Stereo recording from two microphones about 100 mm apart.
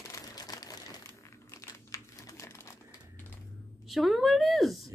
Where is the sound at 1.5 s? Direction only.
30° left (ahead or behind).